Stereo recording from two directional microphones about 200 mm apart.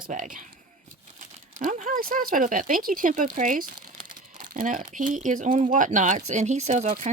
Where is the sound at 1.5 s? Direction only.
40° right (ahead or behind).